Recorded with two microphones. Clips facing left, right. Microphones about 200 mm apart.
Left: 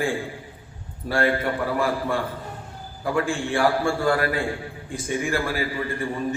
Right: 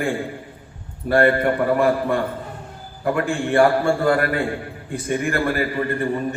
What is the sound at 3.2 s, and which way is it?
A man's voice, 60° right (ahead or behind).